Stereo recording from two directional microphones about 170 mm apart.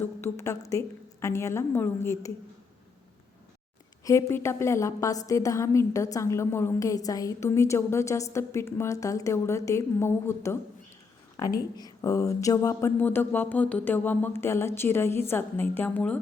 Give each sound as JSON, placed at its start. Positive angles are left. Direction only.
{"t": 0.0, "sound": "a woman's voice", "side_deg": 15}
{"t": 4.0, "sound": "a woman's voice", "side_deg": 15}
{"t": 11.8, "sound": "a sound", "side_deg": 20}
{"t": 13.0, "sound": "a woman's voice", "side_deg": 10}